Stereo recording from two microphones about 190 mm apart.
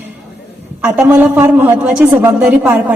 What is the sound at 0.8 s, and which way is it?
A man's voice, 10° right (ahead or behind).